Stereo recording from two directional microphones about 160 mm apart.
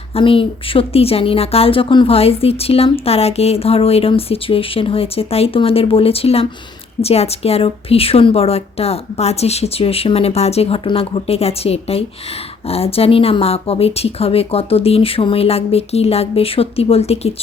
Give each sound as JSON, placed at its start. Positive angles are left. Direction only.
{"t": 0.1, "sound": "a woman's voice", "side_deg": 35}